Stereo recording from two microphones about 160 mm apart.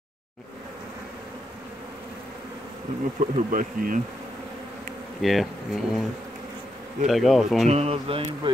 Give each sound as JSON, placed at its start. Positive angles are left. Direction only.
{"t": 3.2, "sound": "bee", "side_deg": -50}
{"t": 5.2, "sound": "speech", "side_deg": 0}
{"t": 7.1, "sound": "speech", "side_deg": 0}
{"t": 7.6, "sound": "speech", "side_deg": -40}